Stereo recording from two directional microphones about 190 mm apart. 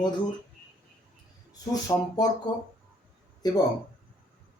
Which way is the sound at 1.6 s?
20° left (ahead or behind).